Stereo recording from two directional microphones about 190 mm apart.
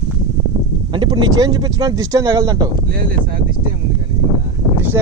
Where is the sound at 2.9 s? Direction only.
50° right (ahead or behind).